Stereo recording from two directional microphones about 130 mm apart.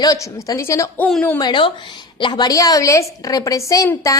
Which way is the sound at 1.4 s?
35° left (ahead or behind).